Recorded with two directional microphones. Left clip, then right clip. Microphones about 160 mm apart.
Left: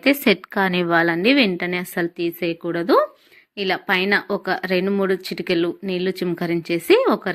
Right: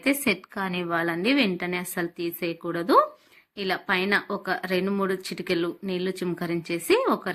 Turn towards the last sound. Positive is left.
turn(degrees=30)  # may be behind; listen again after turning